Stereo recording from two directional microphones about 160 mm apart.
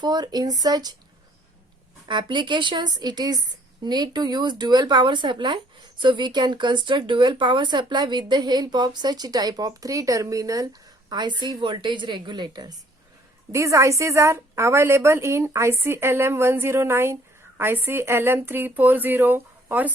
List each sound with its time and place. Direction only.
0.0 s speech: 25° right (ahead or behind)
2.0 s speech: 30° right (ahead or behind); by 19.9 s 10° right (ahead or behind)